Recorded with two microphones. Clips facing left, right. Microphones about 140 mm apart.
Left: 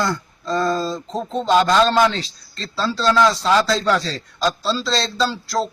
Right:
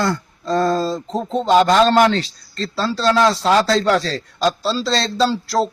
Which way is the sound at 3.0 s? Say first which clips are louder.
Right 1 dB; 25° right (ahead or behind).